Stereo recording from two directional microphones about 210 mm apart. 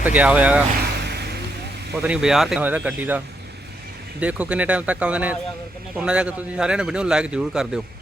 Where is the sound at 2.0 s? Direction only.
5° right (ahead or behind).